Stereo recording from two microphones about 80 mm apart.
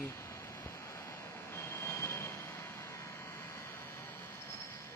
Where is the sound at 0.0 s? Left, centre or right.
Left.